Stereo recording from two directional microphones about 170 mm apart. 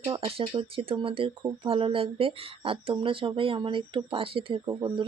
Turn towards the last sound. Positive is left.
turn(degrees=-25)  # may be behind; listen again after turning